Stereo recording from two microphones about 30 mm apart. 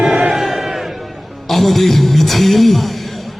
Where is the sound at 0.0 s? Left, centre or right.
Centre.